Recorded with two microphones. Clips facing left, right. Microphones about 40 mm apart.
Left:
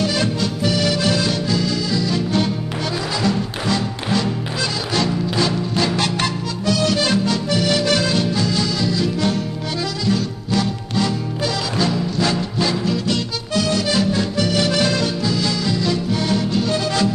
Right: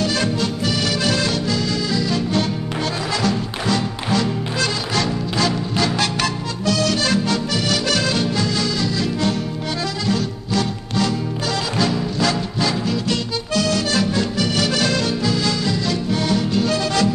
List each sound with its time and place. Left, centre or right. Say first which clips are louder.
6.2 s music: even; right
11.8 s music: even; right
13.7 s music: left 1 dB; right
14.6 s music: left 1 dB; right
16.6 s music: even; right